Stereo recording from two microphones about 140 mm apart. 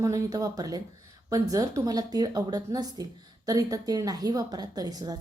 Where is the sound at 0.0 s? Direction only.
25° right (ahead or behind).